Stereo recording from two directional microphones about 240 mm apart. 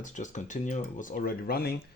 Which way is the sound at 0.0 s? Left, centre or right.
Left.